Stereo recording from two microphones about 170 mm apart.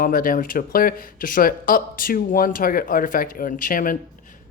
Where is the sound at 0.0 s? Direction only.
55° left (ahead or behind).